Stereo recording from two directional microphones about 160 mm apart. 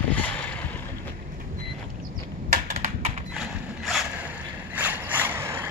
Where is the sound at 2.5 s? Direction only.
45° right (ahead or behind).